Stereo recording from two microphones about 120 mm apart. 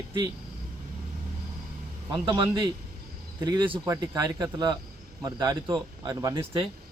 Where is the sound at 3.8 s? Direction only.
30° right (ahead or behind).